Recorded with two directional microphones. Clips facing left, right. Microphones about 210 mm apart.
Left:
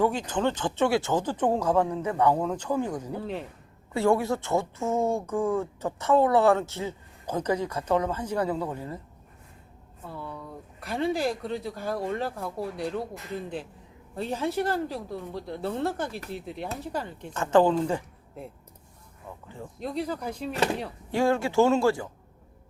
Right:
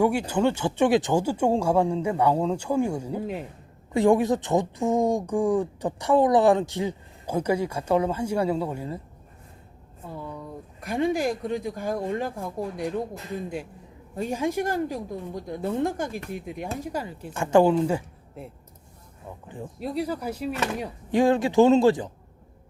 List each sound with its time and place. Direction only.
0.0 s speech: 10° right (ahead or behind)
10.8 s speech: 15° right (ahead or behind)
14.2 s speech: 10° right (ahead or behind)
19.5 s speech: 10° right (ahead or behind)